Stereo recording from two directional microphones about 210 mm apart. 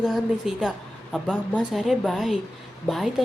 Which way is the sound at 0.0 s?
Centre (ahead or behind).